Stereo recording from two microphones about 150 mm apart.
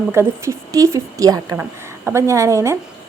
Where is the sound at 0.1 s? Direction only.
20° right (ahead or behind).